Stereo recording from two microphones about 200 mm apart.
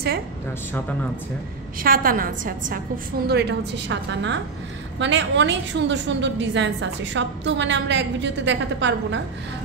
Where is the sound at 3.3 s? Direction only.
55° right (ahead or behind).